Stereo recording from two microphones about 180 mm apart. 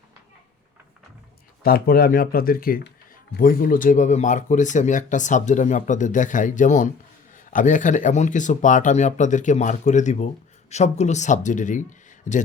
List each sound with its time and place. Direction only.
1.6 s speech: 55° left (ahead or behind)